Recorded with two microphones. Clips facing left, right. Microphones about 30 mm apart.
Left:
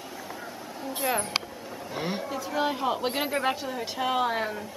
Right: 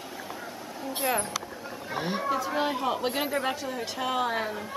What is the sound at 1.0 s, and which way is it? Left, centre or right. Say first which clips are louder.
Speech: even; centre.